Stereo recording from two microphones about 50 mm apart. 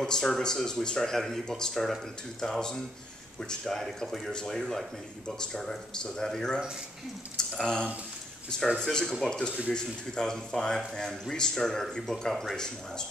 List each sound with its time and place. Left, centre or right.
0.0 s speech: centre
7.6 s speech: centre